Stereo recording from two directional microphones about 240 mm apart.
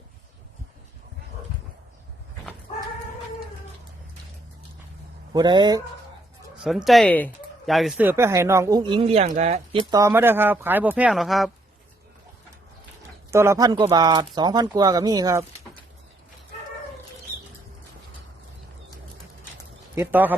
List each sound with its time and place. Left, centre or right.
5.3 s speech: centre
6.6 s speech: centre; by 9.6 s right
9.9 s speech: centre
13.3 s speech: centre
20.0 s speech: centre